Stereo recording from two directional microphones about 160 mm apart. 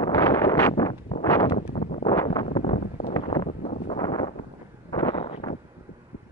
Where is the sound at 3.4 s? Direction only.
45° left (ahead or behind).